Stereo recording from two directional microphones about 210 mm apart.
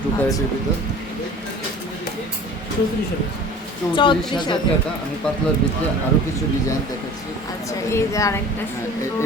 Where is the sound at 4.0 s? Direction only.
20° left (ahead or behind).